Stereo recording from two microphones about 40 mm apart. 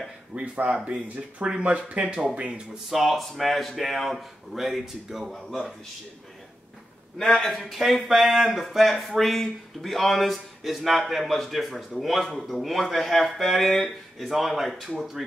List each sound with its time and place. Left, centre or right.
0.3 s speech: right
2.7 s speech: centre
7.2 s speech: centre